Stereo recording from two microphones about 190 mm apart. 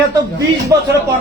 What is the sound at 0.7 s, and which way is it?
Speech, 20° right (ahead or behind).